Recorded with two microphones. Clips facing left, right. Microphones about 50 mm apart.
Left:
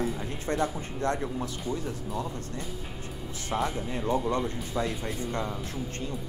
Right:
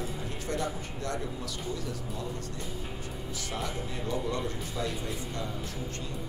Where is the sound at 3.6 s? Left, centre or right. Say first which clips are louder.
Left 5 dB; left.